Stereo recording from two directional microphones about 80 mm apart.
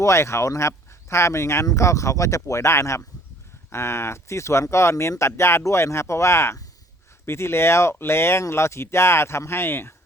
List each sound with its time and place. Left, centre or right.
0.0 s speech: left